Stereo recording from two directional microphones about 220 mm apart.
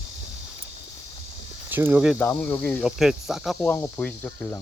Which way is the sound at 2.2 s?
10° left (ahead or behind).